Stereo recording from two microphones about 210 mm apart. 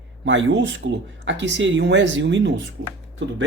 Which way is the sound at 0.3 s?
60° right (ahead or behind).